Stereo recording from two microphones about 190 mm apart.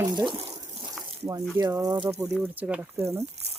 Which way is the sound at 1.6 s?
20° right (ahead or behind).